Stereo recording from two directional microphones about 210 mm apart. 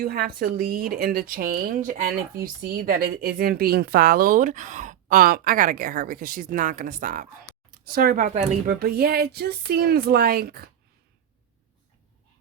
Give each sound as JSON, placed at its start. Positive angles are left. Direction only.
{"t": 0.0, "sound": "a woman's voice", "side_deg": -45}